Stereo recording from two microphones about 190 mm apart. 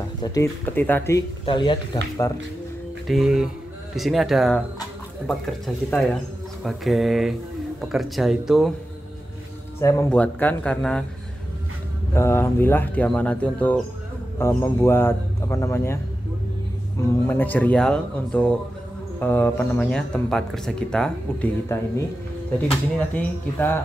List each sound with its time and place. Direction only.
0.2 s speech: 15° left (ahead or behind)
1.4 s speech: 25° left (ahead or behind)
3.1 s speech: centre (ahead or behind)
5.9 s speech: centre (ahead or behind)
9.8 s speech: 15° left (ahead or behind)
12.1 s speech: 15° left (ahead or behind)
17.0 s speech: 10° left (ahead or behind)